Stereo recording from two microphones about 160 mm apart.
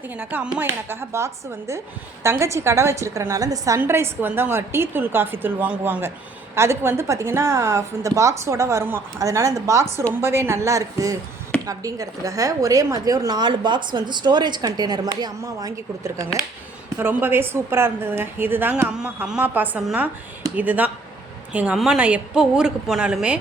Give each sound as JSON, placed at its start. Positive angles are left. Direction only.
{"t": 0.1, "sound": "a woman's voice", "side_deg": -10}